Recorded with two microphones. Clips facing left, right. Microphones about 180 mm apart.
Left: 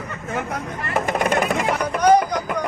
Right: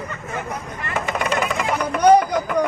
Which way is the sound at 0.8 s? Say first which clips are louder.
Left 3 dB; 45° left (ahead or behind).